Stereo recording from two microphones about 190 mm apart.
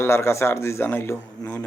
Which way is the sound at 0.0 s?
15° left (ahead or behind).